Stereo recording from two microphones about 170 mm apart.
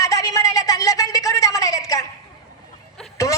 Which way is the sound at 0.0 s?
20° left (ahead or behind).